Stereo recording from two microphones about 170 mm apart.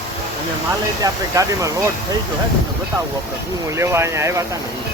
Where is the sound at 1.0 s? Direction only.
20° right (ahead or behind).